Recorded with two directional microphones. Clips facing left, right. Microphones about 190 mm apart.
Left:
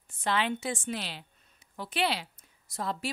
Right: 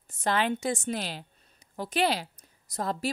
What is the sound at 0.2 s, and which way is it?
A woman's voice, 45° right (ahead or behind).